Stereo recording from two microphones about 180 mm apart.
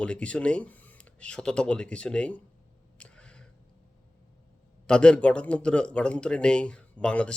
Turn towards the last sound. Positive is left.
turn(degrees=5)  # may be behind; listen again after turning